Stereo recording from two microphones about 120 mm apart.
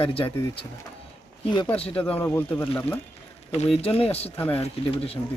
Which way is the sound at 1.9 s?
15° left (ahead or behind).